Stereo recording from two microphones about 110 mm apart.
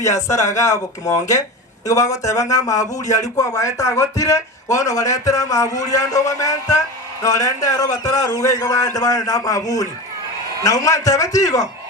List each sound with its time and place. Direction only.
0.0 s speech: 30° left (ahead or behind)